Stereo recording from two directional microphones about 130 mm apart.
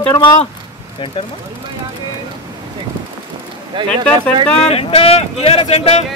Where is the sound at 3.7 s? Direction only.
35° right (ahead or behind).